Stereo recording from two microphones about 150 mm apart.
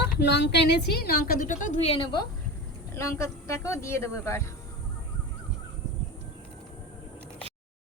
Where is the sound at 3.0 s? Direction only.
20° left (ahead or behind).